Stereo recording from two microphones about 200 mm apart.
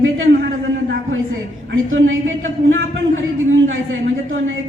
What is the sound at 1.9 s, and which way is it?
Speech, 80° right.